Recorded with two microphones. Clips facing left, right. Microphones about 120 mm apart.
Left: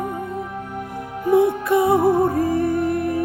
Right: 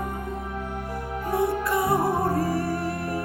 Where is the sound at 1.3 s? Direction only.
20° left (ahead or behind).